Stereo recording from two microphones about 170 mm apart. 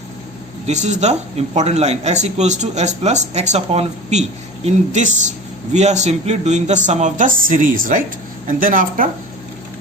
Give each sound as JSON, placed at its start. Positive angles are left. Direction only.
{"t": 0.7, "sound": "speech", "side_deg": -45}